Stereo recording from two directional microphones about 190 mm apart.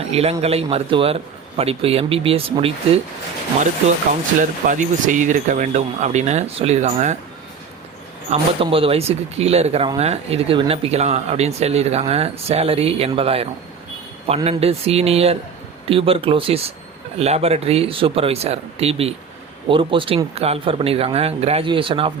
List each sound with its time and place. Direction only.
0.0 s speech: 30° right (ahead or behind)
4.6 s speech: 40° right (ahead or behind)
8.3 s speech: 30° right (ahead or behind)